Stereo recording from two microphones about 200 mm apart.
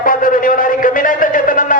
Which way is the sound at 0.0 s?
45° left (ahead or behind).